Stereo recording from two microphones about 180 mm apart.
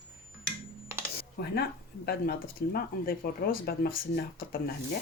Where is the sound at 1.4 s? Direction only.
70° left (ahead or behind).